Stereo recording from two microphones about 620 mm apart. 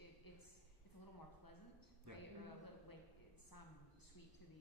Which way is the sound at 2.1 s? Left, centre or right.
Right.